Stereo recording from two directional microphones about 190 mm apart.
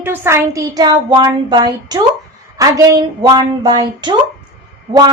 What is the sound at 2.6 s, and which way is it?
A woman's voice, 20° right (ahead or behind).